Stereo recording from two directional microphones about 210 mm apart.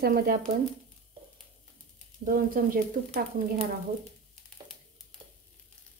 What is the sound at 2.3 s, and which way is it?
Speech, 45° right (ahead or behind).